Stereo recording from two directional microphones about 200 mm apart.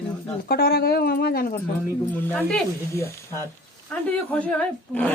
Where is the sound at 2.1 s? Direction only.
10° left (ahead or behind).